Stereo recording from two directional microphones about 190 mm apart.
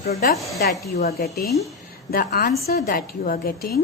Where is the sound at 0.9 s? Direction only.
55° left (ahead or behind).